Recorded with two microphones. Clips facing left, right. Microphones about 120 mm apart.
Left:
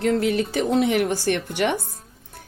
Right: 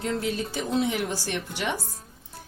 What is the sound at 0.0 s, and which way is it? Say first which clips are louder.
Speech: left 7 dB; 65° left (ahead or behind).